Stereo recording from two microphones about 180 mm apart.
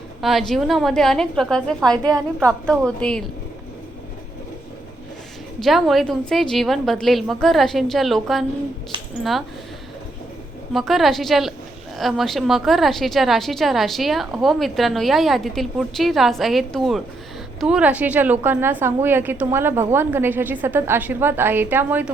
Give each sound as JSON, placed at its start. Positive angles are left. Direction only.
{"t": 0.2, "sound": "a woman's voice", "side_deg": 0}
{"t": 2.0, "sound": "a woman's voice", "side_deg": -15}
{"t": 2.6, "sound": "a woman's voice", "side_deg": 5}
{"t": 5.6, "sound": "a woman's voice", "side_deg": 0}
{"t": 10.8, "sound": "a woman's voice", "side_deg": 0}